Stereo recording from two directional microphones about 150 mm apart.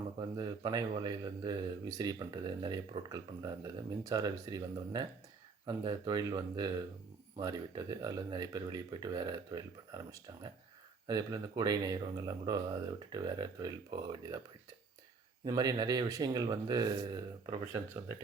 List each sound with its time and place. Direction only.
0.2 s a man's voice: 25° right (ahead or behind)
15.4 s a man's voice: 25° right (ahead or behind)